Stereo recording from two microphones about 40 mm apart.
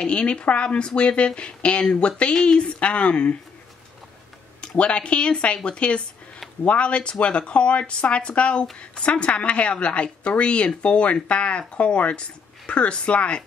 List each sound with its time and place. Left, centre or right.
0.0 s speech: left
4.6 s speech: left